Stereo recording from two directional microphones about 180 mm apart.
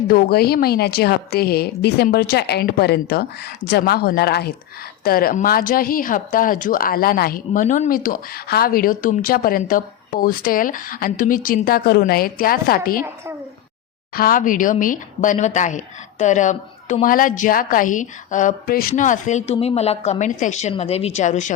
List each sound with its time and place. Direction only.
0.1 s a woman's voice: 60° left (ahead or behind)
14.2 s a woman's voice: 50° left (ahead or behind)